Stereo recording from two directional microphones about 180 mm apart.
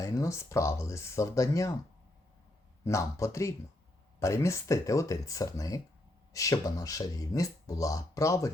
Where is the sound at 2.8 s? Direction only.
15° left (ahead or behind).